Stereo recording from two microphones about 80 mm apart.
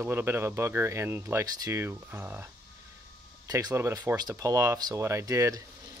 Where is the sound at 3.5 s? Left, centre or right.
Right.